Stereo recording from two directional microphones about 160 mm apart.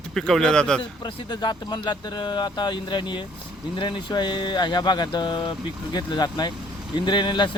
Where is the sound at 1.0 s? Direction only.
25° left (ahead or behind).